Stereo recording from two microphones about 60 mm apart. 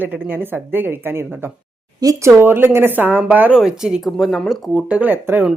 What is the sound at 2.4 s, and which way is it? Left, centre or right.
A woman's voice, right.